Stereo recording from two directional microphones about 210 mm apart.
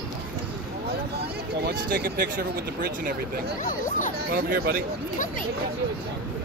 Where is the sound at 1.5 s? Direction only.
50° right (ahead or behind).